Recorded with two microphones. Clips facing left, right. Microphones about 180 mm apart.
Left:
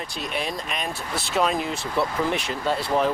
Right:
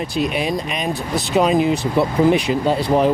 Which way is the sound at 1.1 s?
Centre (ahead or behind).